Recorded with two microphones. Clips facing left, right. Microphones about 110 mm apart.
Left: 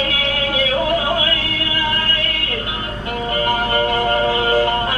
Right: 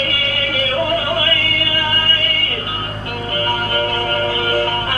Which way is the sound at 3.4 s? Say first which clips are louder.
Left 1 dB; 20° left (ahead or behind).